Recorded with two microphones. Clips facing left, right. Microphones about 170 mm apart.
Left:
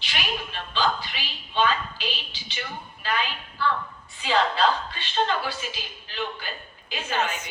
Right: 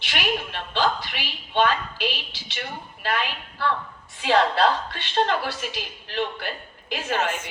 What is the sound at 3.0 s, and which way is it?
A woman's voice, 70° right (ahead or behind).